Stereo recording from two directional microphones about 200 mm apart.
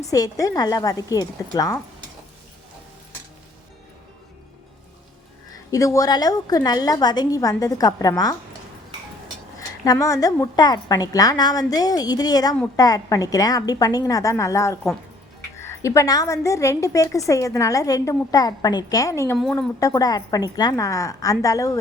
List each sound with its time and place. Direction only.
0.1 s a woman's voice: 15° left (ahead or behind)
5.7 s a woman's voice: 15° left (ahead or behind)
9.6 s a woman's voice: 15° left (ahead or behind)
19.4 s a woman's voice: 5° left (ahead or behind)
19.8 s a woman's voice: 20° left (ahead or behind)